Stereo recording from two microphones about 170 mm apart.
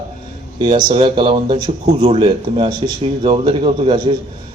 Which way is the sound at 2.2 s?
35° right (ahead or behind).